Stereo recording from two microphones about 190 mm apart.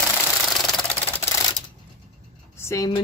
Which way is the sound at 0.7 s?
5° left (ahead or behind).